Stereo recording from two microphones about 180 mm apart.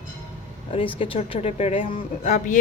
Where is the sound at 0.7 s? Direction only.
30° left (ahead or behind).